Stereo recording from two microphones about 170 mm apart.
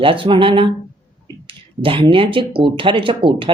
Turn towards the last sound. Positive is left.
turn(degrees=-30)  # may be behind; listen again after turning